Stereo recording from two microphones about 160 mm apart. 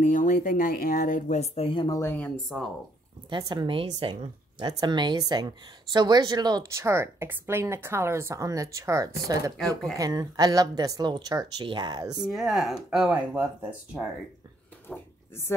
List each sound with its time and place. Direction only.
0.0 s speech: 55° left (ahead or behind); by 2.0 s 30° left (ahead or behind)
2.0 s a woman's voice: 10° left (ahead or behind)
3.3 s a woman's voice: 25° right (ahead or behind)
9.6 s speech: centre (ahead or behind)
9.9 s speech: 20° right (ahead or behind)
12.2 s speech: centre (ahead or behind)
14.9 s a sound: 15° left (ahead or behind)